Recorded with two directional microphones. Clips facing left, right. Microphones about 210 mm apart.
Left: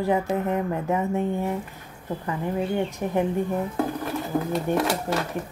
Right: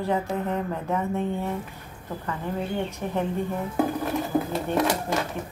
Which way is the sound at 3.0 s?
20° left (ahead or behind).